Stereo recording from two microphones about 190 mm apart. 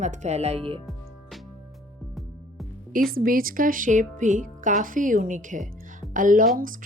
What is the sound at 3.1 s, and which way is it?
Speech, 50° right (ahead or behind).